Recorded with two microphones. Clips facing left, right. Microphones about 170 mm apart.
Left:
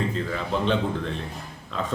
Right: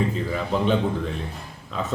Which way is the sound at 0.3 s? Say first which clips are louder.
Right 3 dB; 10° right (ahead or behind).